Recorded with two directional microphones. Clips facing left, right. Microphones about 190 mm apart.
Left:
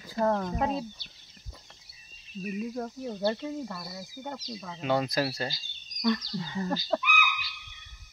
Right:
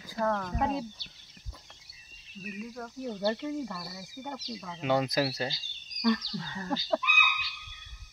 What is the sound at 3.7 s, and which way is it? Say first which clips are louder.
Speech: left 1 dB; 5° right (ahead or behind).